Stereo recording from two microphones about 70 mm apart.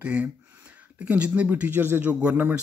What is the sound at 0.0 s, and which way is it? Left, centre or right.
Speech, centre.